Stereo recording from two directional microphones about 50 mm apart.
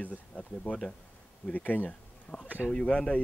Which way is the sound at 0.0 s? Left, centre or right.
Left.